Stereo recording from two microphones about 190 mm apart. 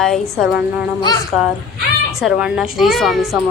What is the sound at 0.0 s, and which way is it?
Speech, centre (ahead or behind).